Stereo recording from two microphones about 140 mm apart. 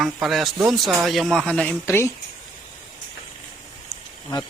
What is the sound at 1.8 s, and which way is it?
Speech, 20° left (ahead or behind).